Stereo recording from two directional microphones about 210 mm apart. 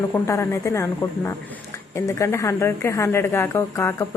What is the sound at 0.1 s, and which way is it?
A woman's voice, 15° left (ahead or behind).